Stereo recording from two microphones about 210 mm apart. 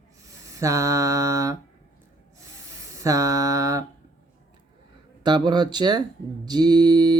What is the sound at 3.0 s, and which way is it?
Speech, 15° right (ahead or behind).